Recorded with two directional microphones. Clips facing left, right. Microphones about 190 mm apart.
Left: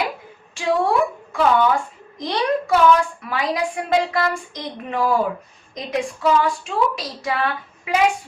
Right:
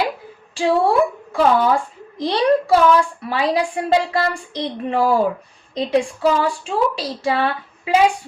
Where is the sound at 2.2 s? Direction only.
30° right (ahead or behind).